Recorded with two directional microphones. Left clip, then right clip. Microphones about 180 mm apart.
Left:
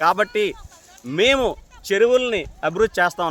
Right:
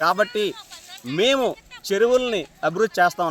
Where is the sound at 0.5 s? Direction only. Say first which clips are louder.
Right 6 dB; 55° left (ahead or behind).